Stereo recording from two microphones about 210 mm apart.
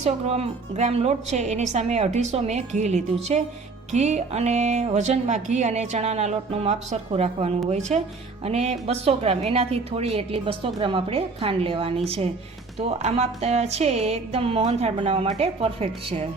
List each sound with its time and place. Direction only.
0.0 s a woman's voice: 30° right (ahead or behind)